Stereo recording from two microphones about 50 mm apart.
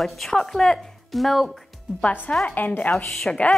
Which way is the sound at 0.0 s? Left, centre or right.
Centre.